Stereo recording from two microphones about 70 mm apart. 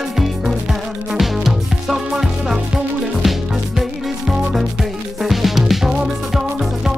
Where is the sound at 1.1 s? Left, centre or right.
Centre.